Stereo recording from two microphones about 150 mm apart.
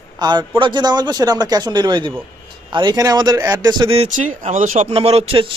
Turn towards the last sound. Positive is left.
turn(degrees=-35)  # may be behind; listen again after turning